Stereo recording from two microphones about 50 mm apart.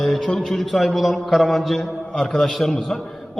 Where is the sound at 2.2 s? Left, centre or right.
Centre.